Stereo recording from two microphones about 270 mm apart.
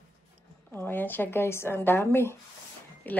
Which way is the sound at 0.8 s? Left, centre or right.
Centre.